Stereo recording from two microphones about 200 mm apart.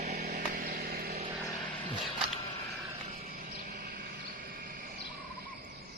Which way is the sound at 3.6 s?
40° right (ahead or behind).